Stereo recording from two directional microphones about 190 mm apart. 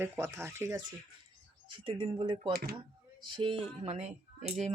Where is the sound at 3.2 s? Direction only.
25° right (ahead or behind).